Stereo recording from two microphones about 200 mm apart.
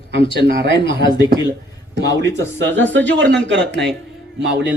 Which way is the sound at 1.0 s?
20° left (ahead or behind).